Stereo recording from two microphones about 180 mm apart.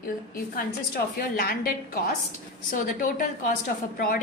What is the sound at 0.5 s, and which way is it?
A woman's voice, 55° left (ahead or behind).